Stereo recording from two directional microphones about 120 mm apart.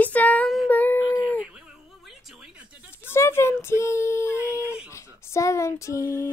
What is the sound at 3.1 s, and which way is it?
Child singing, 20° left (ahead or behind).